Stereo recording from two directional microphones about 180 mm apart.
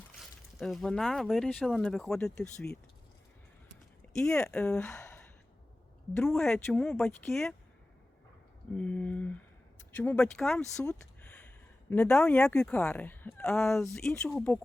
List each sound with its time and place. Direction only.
0.2 s speech: centre (ahead or behind)
4.2 s speech: 5° left (ahead or behind)
4.9 s gasp: 15° left (ahead or behind)
6.1 s speech: centre (ahead or behind)
8.7 s a sound: 5° left (ahead or behind)
9.9 s speech: 10° left (ahead or behind)
11.9 s speech: 5° left (ahead or behind)